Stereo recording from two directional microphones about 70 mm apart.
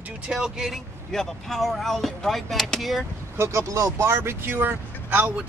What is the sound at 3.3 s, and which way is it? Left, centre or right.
Speech, right.